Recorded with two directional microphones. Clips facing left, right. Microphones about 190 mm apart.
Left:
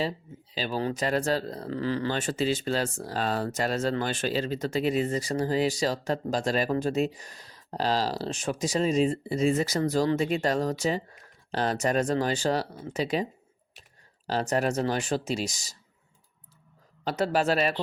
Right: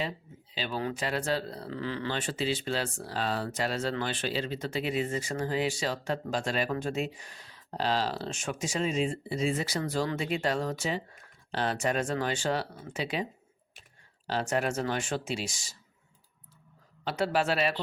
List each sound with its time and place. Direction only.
0.5 s speech: 40° left (ahead or behind)
14.3 s speech: 40° left (ahead or behind)
17.0 s speech: 40° left (ahead or behind)